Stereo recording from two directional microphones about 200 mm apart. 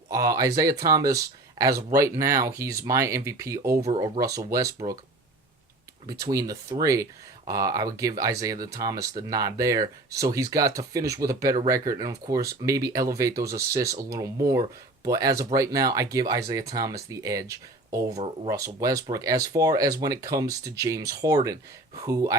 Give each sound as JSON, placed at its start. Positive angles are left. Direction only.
{"t": 0.1, "sound": "speech", "side_deg": -15}
{"t": 6.1, "sound": "speech", "side_deg": -15}